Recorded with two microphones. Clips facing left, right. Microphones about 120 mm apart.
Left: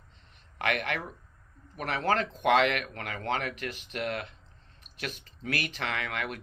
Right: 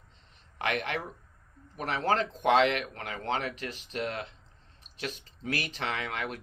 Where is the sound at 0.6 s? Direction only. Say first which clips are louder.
Left 1 dB; 35° right (ahead or behind).